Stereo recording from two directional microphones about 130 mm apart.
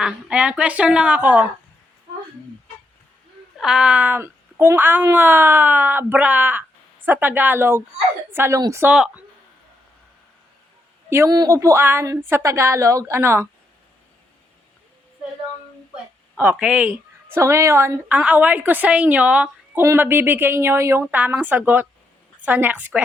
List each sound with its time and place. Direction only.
0.0 s speech: 10° right (ahead or behind)
3.6 s speech: 5° right (ahead or behind)
8.5 s speech: 25° right (ahead or behind)
8.8 s speech: 10° right (ahead or behind)
11.1 s speech: 20° right (ahead or behind)
16.4 s speech: 10° right (ahead or behind)
16.9 s a woman's voice: 20° right (ahead or behind)